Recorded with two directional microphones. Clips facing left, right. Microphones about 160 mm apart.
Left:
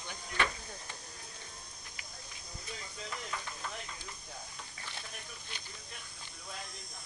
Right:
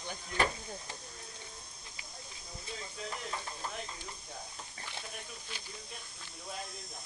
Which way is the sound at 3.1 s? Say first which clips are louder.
Even; 30° right (ahead or behind).